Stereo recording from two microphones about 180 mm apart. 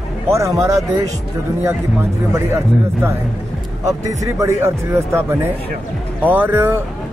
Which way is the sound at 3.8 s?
20° right (ahead or behind).